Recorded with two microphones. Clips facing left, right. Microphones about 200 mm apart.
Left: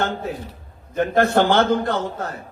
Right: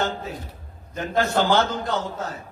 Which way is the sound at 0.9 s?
55° left (ahead or behind).